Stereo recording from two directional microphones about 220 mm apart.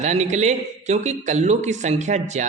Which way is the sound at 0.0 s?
30° right (ahead or behind).